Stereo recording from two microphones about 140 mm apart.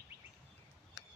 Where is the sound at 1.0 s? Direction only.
30° right (ahead or behind).